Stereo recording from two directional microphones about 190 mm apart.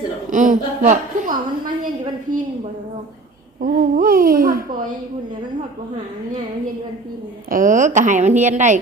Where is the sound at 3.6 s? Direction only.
45° right (ahead or behind).